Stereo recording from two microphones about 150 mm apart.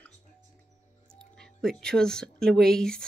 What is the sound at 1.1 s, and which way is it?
Speech, 5° left (ahead or behind).